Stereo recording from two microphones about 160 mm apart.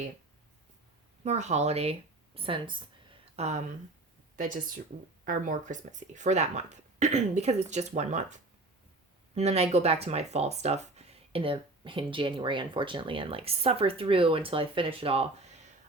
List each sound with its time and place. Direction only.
1.2 s speech: 45° right (ahead or behind)
4.4 s speech: 55° right (ahead or behind)
9.3 s speech: 40° right (ahead or behind)